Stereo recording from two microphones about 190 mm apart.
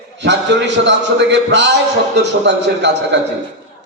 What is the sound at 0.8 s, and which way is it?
A man's voice, 70° right (ahead or behind).